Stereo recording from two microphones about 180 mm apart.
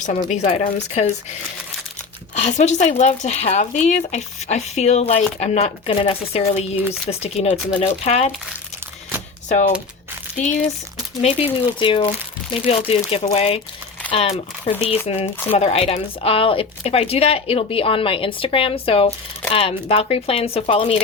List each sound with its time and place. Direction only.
0.0 s speech: 40° left (ahead or behind)
2.3 s speech: 40° left (ahead or behind)
9.5 s speech: 40° left (ahead or behind)
11.2 s speech: 35° left (ahead or behind)